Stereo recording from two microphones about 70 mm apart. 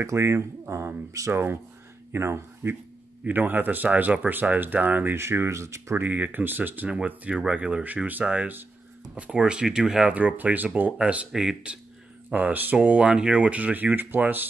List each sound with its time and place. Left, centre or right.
0.0 s speech: right
5.1 s speech: right
5.9 s speech: right
10.1 s speech: right